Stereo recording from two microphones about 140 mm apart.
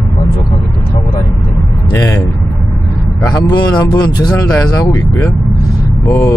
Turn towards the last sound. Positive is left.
turn(degrees=20)  # may be behind; listen again after turning